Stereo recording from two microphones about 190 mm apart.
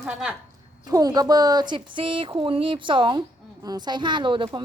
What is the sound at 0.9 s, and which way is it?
Speech, 20° right (ahead or behind).